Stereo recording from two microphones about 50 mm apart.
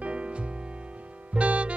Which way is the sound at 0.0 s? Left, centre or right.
Right.